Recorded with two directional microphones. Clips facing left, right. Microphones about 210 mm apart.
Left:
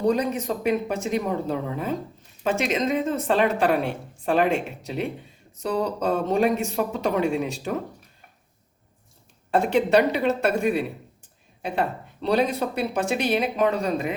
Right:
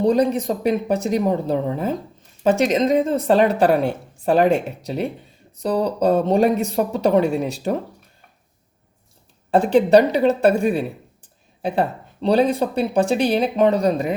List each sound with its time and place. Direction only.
0.0 s speech: 35° right (ahead or behind)
9.5 s speech: 35° right (ahead or behind)